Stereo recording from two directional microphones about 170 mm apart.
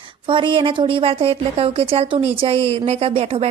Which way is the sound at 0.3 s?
30° right (ahead or behind).